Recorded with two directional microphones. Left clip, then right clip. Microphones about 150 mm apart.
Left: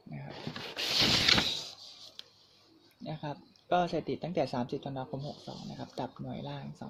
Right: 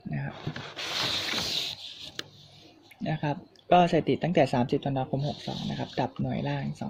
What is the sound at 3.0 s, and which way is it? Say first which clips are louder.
Speech: right 9 dB; 40° right (ahead or behind).